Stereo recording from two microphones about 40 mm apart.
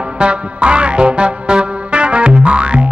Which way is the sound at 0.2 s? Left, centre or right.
Right.